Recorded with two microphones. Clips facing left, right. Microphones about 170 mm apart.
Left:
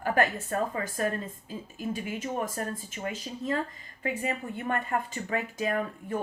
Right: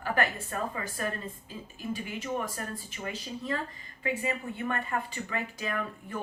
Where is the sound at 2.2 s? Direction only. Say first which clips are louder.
Left 2 dB; 45° left (ahead or behind).